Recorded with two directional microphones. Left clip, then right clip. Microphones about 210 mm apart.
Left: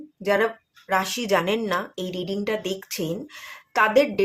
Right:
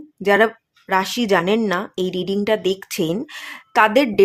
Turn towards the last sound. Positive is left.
turn(degrees=-45)  # may be behind; listen again after turning